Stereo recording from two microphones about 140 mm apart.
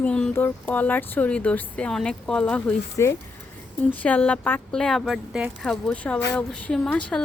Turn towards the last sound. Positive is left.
turn(degrees=10)  # may be behind; listen again after turning